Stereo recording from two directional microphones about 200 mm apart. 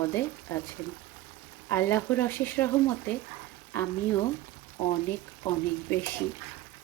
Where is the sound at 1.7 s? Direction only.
10° left (ahead or behind).